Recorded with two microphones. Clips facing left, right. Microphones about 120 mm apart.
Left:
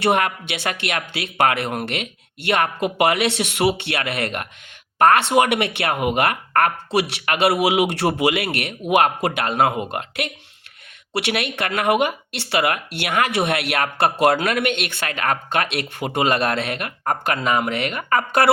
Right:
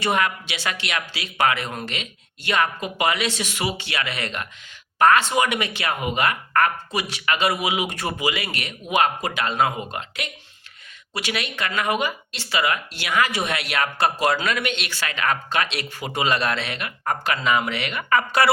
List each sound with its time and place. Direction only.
0.0 s speech: 55° left (ahead or behind)